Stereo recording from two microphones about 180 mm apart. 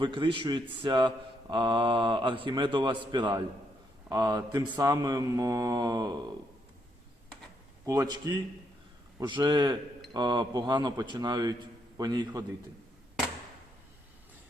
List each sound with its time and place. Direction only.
0.0 s speech: 25° right (ahead or behind)
7.9 s speech: 20° right (ahead or behind)